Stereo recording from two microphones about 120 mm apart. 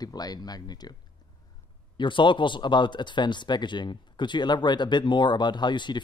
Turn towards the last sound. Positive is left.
turn(degrees=40)  # may be behind; listen again after turning